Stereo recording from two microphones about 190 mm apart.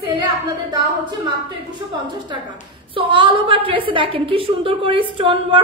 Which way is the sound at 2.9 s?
25° right (ahead or behind).